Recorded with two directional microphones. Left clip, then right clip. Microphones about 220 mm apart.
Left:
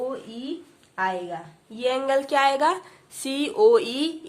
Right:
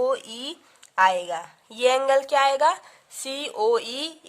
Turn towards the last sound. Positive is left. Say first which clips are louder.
# left 4 dB
turn(degrees=-30)  # may be behind; listen again after turning